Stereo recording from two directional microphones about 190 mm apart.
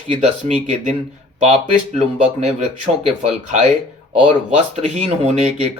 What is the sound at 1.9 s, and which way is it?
Speech, 35° right (ahead or behind).